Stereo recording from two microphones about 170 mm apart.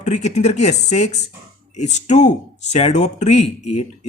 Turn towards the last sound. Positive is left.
turn(degrees=40)  # may be behind; listen again after turning